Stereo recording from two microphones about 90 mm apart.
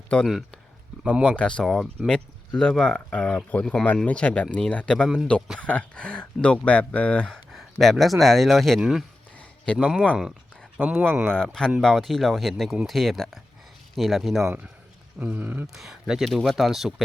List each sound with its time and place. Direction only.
1.2 s speech: 10° left (ahead or behind)
5.0 s speech: 5° right (ahead or behind)
5.5 s speech: 15° left (ahead or behind); by 10.1 s 10° right (ahead or behind)
10.8 s speech: 20° right (ahead or behind)
11.3 s speech: 5° left (ahead or behind)
15.2 s speech: 15° right (ahead or behind)
15.6 s speech: centre (ahead or behind)